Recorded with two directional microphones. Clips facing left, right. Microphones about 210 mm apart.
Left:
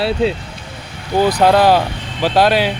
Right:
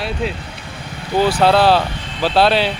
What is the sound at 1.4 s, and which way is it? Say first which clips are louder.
Speech: left 2 dB; 15° left (ahead or behind).